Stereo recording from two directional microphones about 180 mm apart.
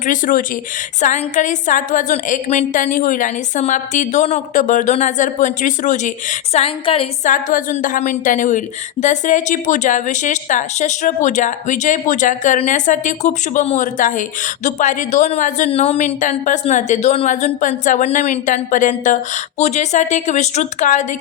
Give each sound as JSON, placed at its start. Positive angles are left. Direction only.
{"t": 0.0, "sound": "a woman's voice", "side_deg": 50}
{"t": 7.3, "sound": "a woman's voice", "side_deg": 45}